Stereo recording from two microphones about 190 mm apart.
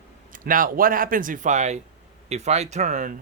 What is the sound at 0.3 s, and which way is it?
Speech, 45° right (ahead or behind).